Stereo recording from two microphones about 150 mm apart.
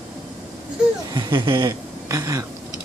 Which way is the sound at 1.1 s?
30° right (ahead or behind).